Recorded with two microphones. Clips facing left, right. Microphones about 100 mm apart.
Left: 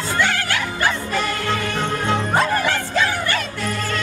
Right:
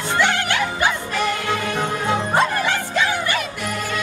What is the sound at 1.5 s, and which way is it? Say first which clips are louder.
Music: even; 5° right (ahead or behind).